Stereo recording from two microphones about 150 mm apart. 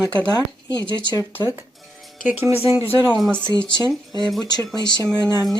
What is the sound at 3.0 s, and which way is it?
Speech, centre (ahead or behind).